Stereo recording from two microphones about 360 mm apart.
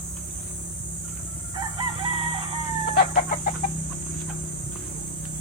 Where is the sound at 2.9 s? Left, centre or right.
Left.